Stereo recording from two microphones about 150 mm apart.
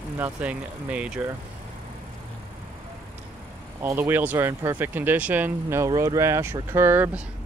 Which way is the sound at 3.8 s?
15° right (ahead or behind).